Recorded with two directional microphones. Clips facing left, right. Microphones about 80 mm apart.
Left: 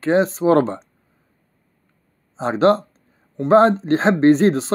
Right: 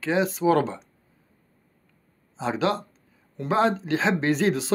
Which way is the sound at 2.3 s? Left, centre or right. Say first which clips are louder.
Left 9 dB; left.